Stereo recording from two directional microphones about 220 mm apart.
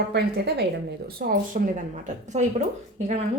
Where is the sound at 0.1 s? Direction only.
50° right (ahead or behind).